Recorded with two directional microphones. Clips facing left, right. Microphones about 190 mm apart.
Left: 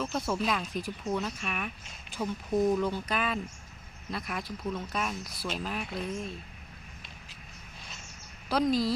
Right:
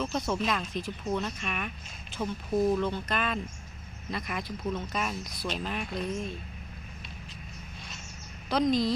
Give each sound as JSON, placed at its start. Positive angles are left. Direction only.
{"t": 0.0, "sound": "speech", "side_deg": 5}
{"t": 2.1, "sound": "speech", "side_deg": 15}
{"t": 8.5, "sound": "speech", "side_deg": 5}